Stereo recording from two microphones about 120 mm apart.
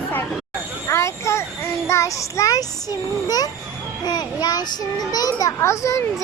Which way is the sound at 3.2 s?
30° left (ahead or behind).